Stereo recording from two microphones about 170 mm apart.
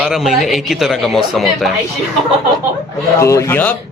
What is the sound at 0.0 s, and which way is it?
Speech, centre (ahead or behind).